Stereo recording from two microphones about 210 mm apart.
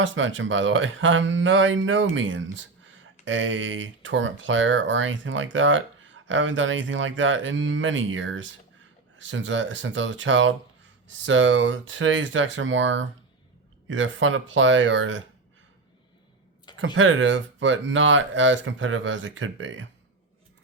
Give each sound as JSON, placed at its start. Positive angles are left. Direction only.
{"t": 0.0, "sound": "speech", "side_deg": -65}
{"t": 16.7, "sound": "speech", "side_deg": -60}